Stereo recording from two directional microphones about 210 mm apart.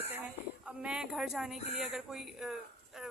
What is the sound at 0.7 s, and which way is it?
Speech, 5° right (ahead or behind).